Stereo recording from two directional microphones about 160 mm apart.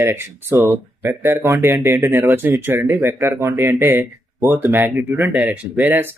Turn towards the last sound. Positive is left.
turn(degrees=-15)  # may be behind; listen again after turning